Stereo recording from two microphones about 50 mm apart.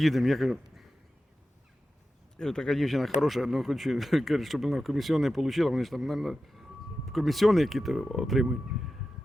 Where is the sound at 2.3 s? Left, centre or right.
Centre.